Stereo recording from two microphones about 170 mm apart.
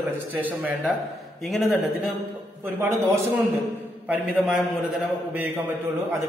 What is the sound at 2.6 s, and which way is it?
Speech, 15° right (ahead or behind).